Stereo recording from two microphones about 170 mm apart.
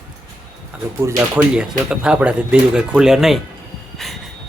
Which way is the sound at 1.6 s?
5° right (ahead or behind).